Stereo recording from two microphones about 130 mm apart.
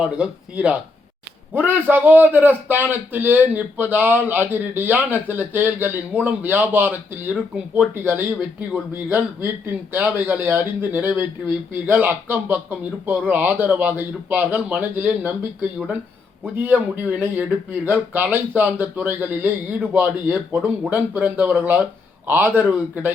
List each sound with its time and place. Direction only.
0.0 s a man's voice: 10° right (ahead or behind)
16.4 s a man's voice: 15° right (ahead or behind)